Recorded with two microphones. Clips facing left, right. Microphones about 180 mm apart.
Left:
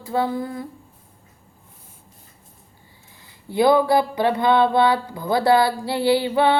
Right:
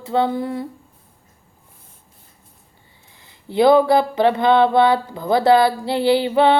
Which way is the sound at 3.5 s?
20° right (ahead or behind).